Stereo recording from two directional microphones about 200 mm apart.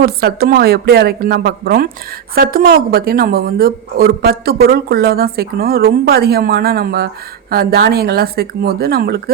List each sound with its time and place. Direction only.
0.0 s speech: 50° right (ahead or behind)